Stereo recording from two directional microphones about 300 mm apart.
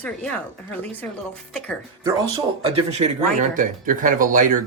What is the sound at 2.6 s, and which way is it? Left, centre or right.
Speech, right.